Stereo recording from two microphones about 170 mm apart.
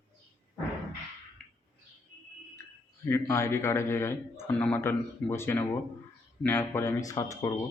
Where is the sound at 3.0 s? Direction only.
15° left (ahead or behind).